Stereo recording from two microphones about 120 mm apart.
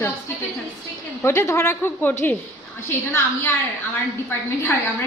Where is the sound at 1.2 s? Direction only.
20° left (ahead or behind).